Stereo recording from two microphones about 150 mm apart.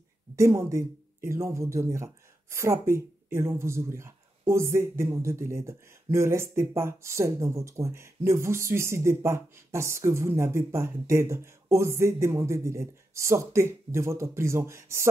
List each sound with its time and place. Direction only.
0.4 s speech: 20° right (ahead or behind)